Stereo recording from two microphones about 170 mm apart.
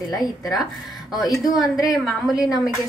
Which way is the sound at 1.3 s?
Centre (ahead or behind).